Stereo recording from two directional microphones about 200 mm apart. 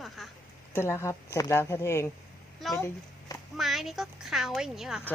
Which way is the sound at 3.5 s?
Centre (ahead or behind).